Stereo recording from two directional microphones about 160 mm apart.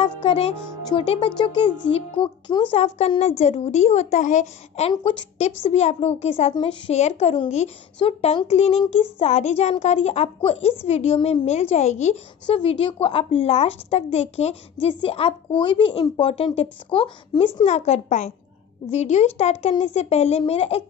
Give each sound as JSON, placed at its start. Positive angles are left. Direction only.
{"t": 0.2, "sound": "music", "side_deg": 40}
{"t": 0.8, "sound": "a woman's voice", "side_deg": 35}
{"t": 12.4, "sound": "a woman's voice", "side_deg": 35}
{"t": 17.6, "sound": "a woman's voice", "side_deg": 45}